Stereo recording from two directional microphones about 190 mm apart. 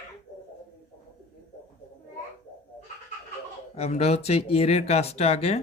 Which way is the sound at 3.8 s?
35° left (ahead or behind).